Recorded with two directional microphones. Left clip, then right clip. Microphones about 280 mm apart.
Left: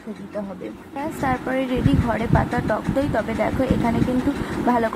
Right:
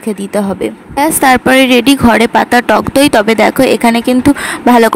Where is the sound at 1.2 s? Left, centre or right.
Right.